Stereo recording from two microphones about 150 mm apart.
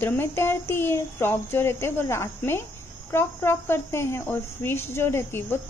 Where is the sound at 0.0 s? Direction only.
15° left (ahead or behind).